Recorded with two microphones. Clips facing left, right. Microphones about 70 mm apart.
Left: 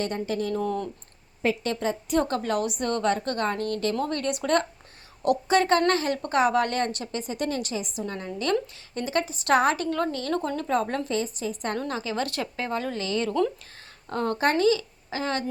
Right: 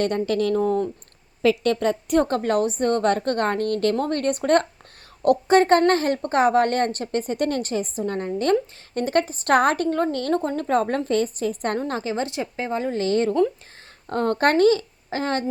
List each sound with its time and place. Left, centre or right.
0.0 s speech: right
0.5 s speech: right
1.4 s a woman's voice: right
1.7 s a woman's voice: right
2.2 s speech: right
3.1 s a woman's voice: right
12.1 s speech: right
13.0 s speech: right